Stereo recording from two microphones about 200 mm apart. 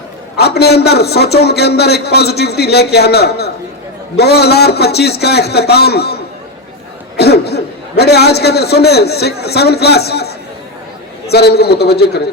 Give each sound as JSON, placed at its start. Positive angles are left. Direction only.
{"t": 0.3, "sound": "a man's voice", "side_deg": 55}
{"t": 7.2, "sound": "a man's voice", "side_deg": 55}